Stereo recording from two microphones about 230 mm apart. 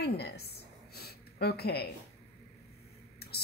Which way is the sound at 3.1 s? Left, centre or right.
Left.